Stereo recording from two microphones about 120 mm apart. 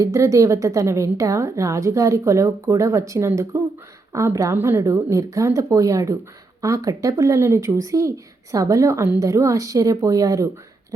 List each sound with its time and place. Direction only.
0.0 s a woman's voice: 25° right (ahead or behind)